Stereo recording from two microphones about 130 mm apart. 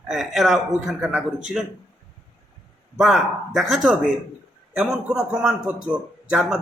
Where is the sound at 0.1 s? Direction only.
Centre (ahead or behind).